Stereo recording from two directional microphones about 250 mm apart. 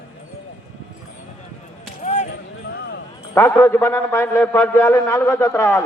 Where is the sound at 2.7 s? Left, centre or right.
Left.